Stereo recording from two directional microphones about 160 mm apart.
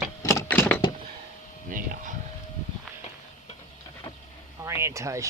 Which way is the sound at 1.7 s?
55° right (ahead or behind).